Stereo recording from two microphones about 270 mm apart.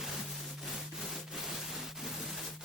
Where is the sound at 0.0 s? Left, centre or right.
Centre.